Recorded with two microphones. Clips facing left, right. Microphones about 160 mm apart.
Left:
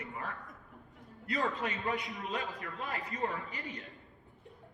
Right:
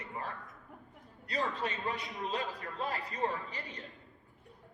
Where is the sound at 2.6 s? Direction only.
40° right (ahead or behind).